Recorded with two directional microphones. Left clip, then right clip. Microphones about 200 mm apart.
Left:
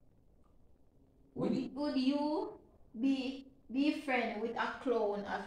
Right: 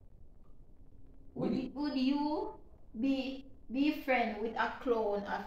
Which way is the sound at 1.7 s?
20° right (ahead or behind).